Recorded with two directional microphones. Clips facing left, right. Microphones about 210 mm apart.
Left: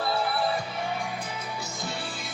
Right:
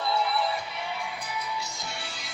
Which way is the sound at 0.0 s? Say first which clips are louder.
Left 1 dB; 55° left (ahead or behind).